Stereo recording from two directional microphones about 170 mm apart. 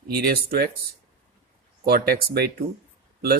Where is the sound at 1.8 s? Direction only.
65° right (ahead or behind).